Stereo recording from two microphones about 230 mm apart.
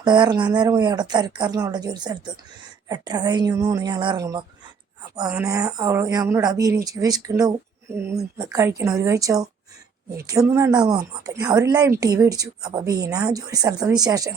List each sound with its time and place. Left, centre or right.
0.0 s speech: centre